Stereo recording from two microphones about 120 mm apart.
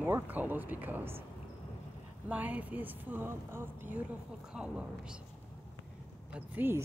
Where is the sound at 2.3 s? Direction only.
15° right (ahead or behind).